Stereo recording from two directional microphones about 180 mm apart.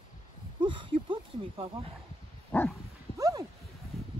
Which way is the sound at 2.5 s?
10° left (ahead or behind).